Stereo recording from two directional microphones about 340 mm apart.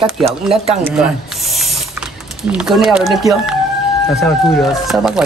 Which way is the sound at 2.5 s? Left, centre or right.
Centre.